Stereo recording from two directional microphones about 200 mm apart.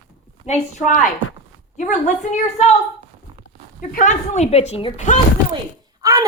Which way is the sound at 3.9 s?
40° left (ahead or behind).